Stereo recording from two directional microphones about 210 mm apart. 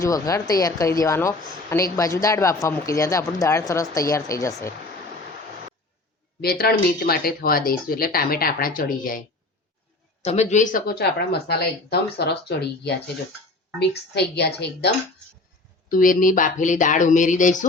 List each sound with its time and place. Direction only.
0.0 s speech: 15° left (ahead or behind)
6.4 s speech: 50° left (ahead or behind)
10.2 s speech: 30° left (ahead or behind); by 14.9 s 50° left (ahead or behind)
15.9 s speech: 40° left (ahead or behind)